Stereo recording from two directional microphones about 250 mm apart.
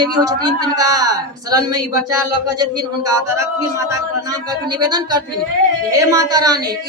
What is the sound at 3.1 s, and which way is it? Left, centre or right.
Speech, centre.